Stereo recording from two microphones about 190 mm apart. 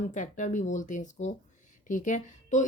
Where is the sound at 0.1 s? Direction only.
40° left (ahead or behind).